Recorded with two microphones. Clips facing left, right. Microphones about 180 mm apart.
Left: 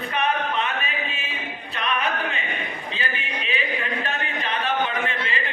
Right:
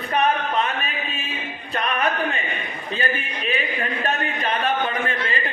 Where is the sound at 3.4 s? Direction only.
45° right (ahead or behind).